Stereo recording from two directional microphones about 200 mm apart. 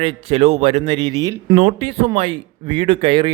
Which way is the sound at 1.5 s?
40° right (ahead or behind).